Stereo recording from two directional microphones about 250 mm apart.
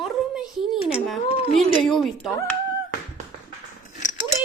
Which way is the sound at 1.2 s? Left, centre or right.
Left.